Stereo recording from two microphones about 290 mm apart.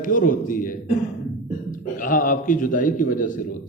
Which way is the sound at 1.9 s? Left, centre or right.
Left.